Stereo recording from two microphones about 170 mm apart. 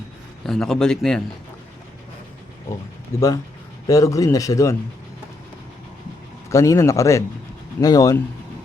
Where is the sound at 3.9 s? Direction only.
20° left (ahead or behind).